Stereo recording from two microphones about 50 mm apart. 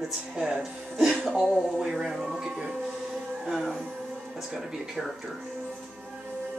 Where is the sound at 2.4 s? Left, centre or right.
Centre.